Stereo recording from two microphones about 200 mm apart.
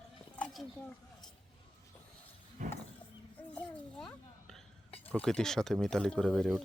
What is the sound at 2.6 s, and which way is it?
Wild animals, 40° right (ahead or behind).